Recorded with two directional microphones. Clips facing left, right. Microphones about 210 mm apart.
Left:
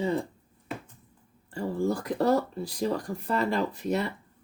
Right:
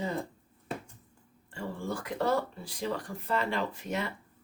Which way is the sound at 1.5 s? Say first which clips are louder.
Left 8 dB; 40° left (ahead or behind).